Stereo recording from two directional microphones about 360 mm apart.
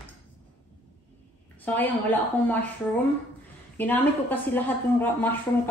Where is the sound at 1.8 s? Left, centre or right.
Centre.